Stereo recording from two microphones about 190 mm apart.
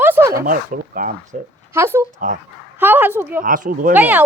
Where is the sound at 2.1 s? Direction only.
45° right (ahead or behind).